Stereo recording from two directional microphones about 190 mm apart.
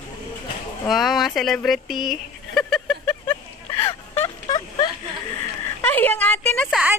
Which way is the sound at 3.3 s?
15° left (ahead or behind).